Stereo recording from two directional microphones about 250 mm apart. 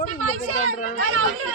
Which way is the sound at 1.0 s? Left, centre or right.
Right.